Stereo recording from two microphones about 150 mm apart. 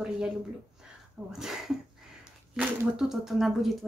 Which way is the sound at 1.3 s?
5° right (ahead or behind).